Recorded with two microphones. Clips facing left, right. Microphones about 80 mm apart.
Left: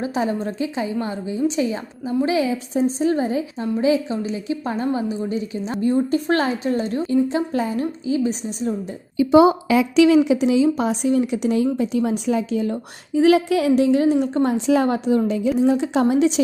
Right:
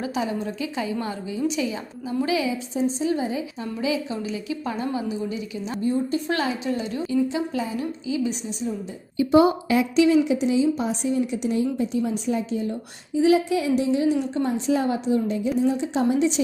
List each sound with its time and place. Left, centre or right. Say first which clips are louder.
0.0 s a woman's voice: left 4 dB; left
5.8 s a woman's voice: left 5 dB; left
6.2 s a woman's voice: left 5 dB; left
9.9 s speech: left 4 dB; left
13.1 s a woman's voice: left 4 dB; left
14.4 s a woman's voice: left 5 dB; left
14.8 s a woman's voice: left 4 dB; left
15.3 s speech: left 4 dB; left